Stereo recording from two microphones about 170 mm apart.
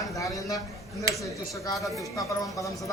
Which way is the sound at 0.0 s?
20° left (ahead or behind).